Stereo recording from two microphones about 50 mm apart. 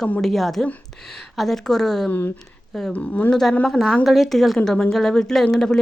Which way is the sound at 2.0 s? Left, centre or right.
Left.